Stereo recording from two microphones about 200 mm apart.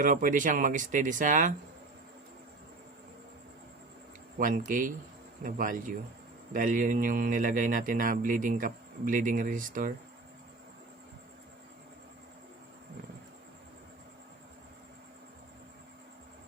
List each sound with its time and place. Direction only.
0.0 s speech: 40° right (ahead or behind)
4.4 s speech: 45° right (ahead or behind)